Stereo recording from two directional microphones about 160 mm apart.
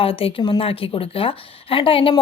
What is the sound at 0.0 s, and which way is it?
A woman's voice, 35° left (ahead or behind).